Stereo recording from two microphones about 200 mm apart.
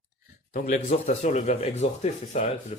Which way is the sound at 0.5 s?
40° left (ahead or behind).